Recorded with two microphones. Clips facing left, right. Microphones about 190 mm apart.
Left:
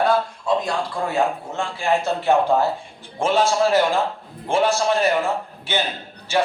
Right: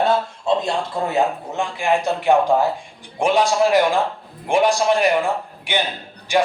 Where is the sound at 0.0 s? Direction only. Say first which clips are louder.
Right 1 dB; 25° right (ahead or behind).